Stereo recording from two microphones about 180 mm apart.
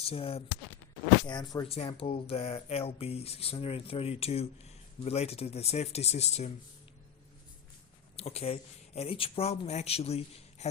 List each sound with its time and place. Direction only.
0.0 s speech: 30° left (ahead or behind)
8.1 s speech: 35° left (ahead or behind)